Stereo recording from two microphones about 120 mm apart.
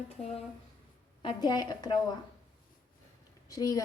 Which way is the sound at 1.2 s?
35° left (ahead or behind).